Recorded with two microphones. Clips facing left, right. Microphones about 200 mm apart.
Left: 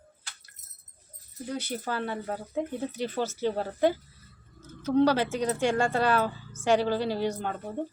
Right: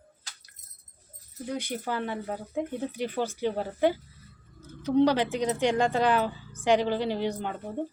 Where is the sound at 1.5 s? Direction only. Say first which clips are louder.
Right 1 dB; 10° right (ahead or behind).